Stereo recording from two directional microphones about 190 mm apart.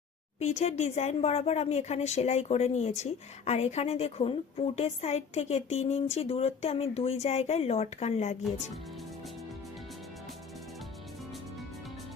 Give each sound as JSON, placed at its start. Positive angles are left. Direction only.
{"t": 0.3, "sound": "speech", "side_deg": 35}